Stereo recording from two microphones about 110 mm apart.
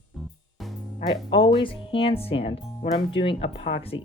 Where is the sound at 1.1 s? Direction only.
50° left (ahead or behind).